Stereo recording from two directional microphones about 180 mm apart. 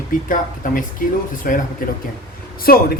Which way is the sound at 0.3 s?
50° left (ahead or behind).